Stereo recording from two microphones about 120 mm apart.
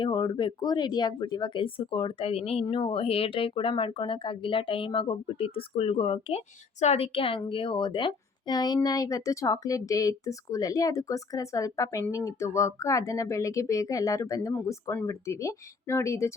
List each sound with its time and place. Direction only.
0.0 s a woman's voice: 40° left (ahead or behind); by 16.3 s 25° left (ahead or behind)